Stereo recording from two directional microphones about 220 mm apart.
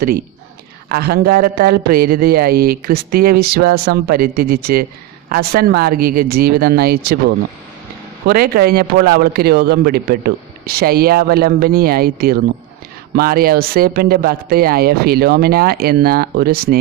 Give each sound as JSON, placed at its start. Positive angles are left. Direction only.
{"t": 0.8, "sound": "speech", "side_deg": -45}